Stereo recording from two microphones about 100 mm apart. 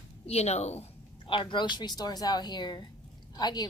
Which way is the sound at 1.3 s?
55° left (ahead or behind).